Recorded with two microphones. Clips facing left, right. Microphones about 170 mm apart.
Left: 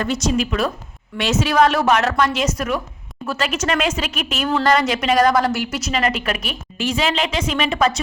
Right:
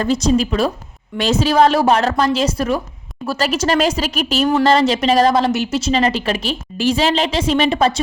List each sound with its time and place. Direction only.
0.0 s a woman's voice: 30° right (ahead or behind)